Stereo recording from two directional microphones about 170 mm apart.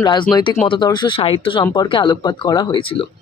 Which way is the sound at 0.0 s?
25° left (ahead or behind).